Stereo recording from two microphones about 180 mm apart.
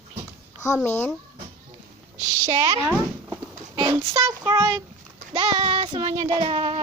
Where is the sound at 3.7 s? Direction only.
25° right (ahead or behind).